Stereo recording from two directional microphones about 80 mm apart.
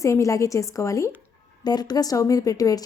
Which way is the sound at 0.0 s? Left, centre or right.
Left.